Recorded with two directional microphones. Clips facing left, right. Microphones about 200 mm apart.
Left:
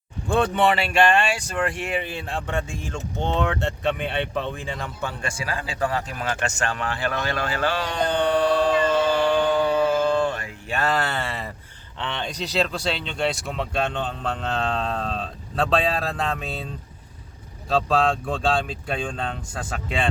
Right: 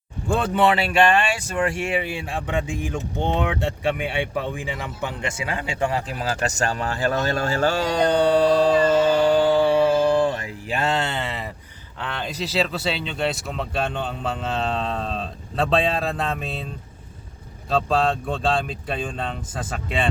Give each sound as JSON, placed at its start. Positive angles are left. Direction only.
{"t": 0.3, "sound": "speech", "side_deg": -5}
{"t": 9.2, "sound": "music", "side_deg": -35}
{"t": 10.0, "sound": "mantra", "side_deg": -20}
{"t": 10.7, "sound": "speech", "side_deg": -25}
{"t": 11.9, "sound": "speech", "side_deg": -5}
{"t": 17.7, "sound": "speech", "side_deg": 0}